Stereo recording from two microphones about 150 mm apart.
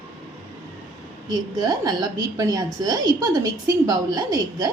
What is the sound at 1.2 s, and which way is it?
A woman's voice, 25° right (ahead or behind).